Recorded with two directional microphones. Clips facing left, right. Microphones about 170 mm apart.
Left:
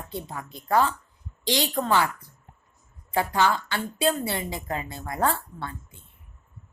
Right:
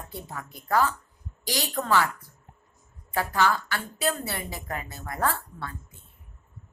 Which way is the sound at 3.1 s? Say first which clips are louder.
Left 2 dB; 25° left (ahead or behind).